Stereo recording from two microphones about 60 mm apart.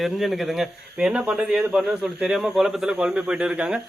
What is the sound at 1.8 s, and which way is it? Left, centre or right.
Speech, centre.